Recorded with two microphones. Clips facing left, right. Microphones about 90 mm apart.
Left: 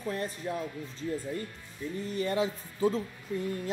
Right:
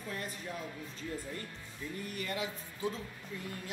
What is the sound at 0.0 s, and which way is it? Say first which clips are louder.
Speech: left 7 dB; 35° left (ahead or behind).